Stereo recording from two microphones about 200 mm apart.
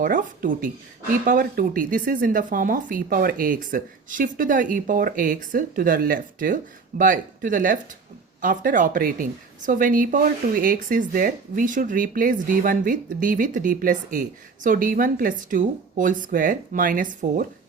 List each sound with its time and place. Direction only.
0.0 s a woman's voice: 40° right (ahead or behind)